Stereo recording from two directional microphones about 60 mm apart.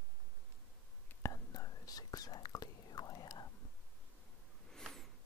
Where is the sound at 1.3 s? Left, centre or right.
Left.